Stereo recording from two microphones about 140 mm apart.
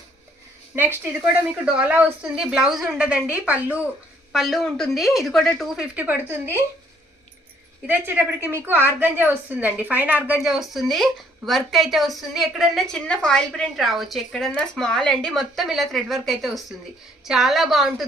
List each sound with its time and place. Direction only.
1.7 s a woman's voice: 10° right (ahead or behind)
5.9 s a woman's voice: 15° right (ahead or behind)
7.8 s a woman's voice: 15° right (ahead or behind)